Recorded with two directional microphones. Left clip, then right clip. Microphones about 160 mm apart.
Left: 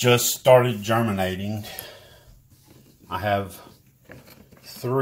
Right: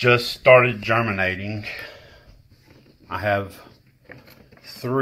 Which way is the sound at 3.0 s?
20° left (ahead or behind).